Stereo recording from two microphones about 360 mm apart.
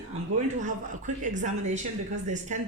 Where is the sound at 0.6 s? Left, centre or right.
Right.